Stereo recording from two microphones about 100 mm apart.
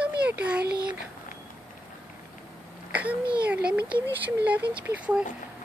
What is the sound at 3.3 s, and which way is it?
Speech, 15° right (ahead or behind).